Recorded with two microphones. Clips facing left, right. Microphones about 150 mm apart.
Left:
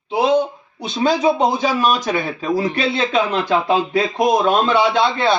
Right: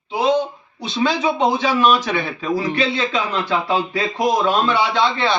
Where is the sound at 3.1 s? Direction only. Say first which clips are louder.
Left 4 dB; 55° left (ahead or behind).